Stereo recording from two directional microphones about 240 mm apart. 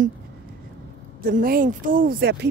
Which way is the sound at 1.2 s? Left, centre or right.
Right.